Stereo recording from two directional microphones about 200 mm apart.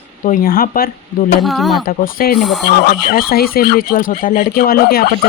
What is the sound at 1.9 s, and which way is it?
Speech, 45° left (ahead or behind).